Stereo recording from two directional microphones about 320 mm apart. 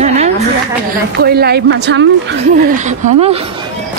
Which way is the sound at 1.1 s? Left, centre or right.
Right.